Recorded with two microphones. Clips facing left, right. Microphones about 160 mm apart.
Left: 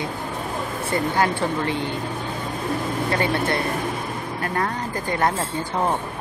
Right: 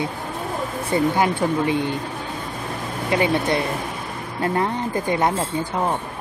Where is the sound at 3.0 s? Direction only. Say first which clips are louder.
Right 4 dB; 15° right (ahead or behind).